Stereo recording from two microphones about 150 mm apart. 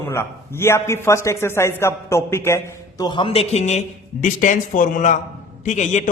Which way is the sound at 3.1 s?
35° left (ahead or behind).